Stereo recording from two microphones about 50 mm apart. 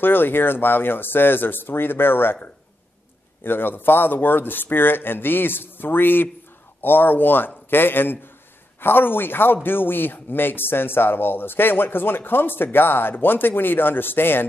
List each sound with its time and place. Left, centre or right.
0.0 s speech: left
3.4 s speech: left